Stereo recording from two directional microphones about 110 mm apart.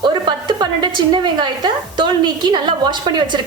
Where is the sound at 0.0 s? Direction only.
45° right (ahead or behind).